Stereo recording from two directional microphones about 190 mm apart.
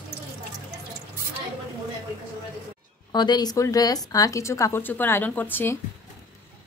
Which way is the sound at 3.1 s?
20° left (ahead or behind).